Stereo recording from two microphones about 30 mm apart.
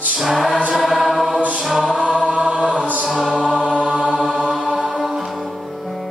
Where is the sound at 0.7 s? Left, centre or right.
Centre.